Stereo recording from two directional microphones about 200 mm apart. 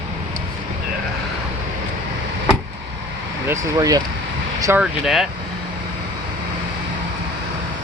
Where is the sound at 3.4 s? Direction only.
15° right (ahead or behind).